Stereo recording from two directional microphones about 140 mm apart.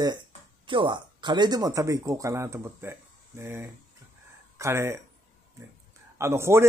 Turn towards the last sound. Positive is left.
turn(degrees=-20)  # may be behind; listen again after turning